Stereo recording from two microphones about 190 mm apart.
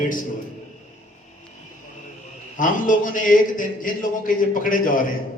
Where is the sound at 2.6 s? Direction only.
45° left (ahead or behind).